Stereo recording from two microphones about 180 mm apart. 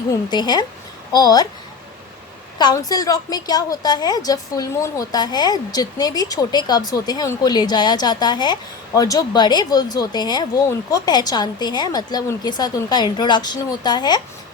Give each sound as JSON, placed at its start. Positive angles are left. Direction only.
{"t": 0.1, "sound": "a woman's voice", "side_deg": 25}
{"t": 2.6, "sound": "a woman's voice", "side_deg": 20}